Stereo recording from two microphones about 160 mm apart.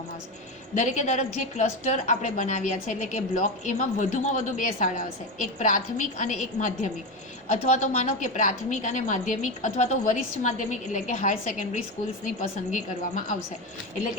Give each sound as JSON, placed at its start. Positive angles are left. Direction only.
{"t": 0.7, "sound": "a woman's voice", "side_deg": 50}